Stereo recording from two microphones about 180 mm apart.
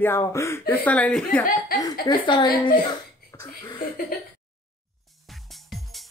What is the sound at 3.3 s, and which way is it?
Cough, 20° left (ahead or behind).